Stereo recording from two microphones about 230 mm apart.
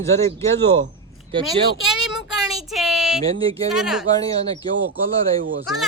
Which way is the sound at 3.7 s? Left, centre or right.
Centre.